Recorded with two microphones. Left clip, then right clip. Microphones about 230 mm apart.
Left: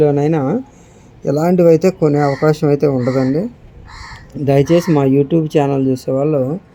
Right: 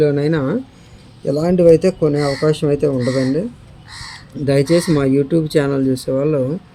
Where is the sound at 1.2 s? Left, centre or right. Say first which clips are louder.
Left 1 dB; centre.